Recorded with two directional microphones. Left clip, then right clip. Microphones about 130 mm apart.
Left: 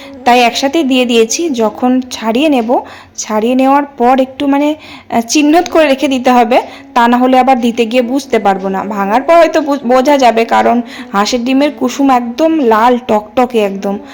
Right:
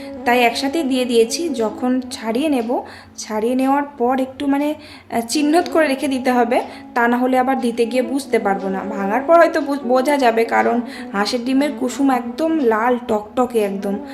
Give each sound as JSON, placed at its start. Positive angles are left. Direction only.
{"t": 0.3, "sound": "a woman's voice", "side_deg": 45}